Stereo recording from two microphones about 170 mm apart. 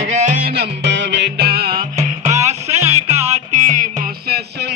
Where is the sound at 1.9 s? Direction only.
40° right (ahead or behind).